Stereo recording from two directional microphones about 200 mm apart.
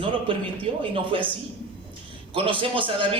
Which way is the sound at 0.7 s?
30° right (ahead or behind).